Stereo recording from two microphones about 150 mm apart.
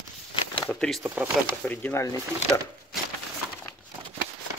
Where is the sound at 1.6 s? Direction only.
10° left (ahead or behind).